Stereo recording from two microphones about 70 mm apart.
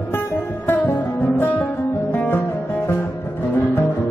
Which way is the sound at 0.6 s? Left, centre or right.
Left.